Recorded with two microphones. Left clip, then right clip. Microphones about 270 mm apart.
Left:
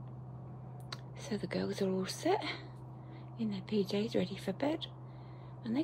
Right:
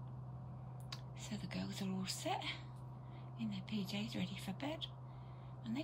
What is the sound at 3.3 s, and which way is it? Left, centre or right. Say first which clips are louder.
Speech: left 11 dB; left.